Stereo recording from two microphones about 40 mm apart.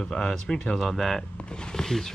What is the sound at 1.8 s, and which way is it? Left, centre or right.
Speech, centre.